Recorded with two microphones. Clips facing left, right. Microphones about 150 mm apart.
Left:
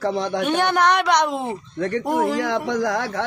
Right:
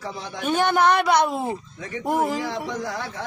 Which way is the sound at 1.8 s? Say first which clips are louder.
Left 10 dB; 70° left (ahead or behind).